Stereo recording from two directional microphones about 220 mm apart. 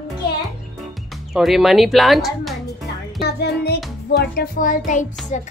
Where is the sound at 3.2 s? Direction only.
45° left (ahead or behind).